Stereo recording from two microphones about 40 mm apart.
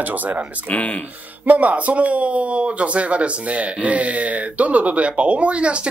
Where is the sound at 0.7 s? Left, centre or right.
Left.